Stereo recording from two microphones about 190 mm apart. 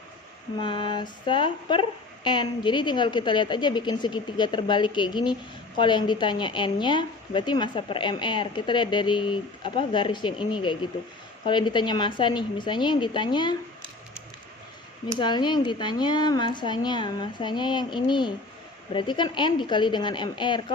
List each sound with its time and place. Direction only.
0.6 s speech: 25° left (ahead or behind)
15.2 s speech: 25° left (ahead or behind)